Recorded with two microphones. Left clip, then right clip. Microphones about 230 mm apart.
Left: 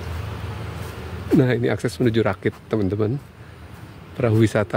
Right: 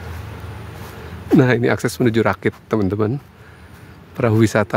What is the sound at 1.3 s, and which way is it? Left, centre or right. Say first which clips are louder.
Speech: right 5 dB; centre.